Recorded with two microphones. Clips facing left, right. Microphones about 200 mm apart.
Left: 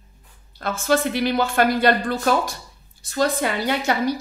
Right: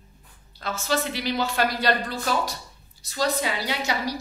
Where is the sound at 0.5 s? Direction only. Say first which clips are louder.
Left 6 dB; 50° left (ahead or behind).